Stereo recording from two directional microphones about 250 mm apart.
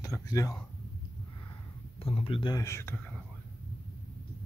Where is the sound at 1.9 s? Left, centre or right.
Left.